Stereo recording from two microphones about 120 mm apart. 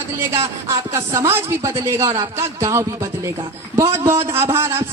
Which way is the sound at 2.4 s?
25° right (ahead or behind).